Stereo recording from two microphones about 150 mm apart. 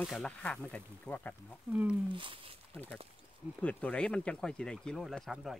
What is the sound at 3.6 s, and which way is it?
Speech, 10° left (ahead or behind).